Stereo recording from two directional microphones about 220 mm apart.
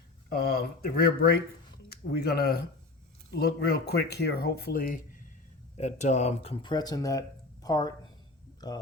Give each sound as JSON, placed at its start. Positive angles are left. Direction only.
{"t": 0.3, "sound": "speech", "side_deg": 45}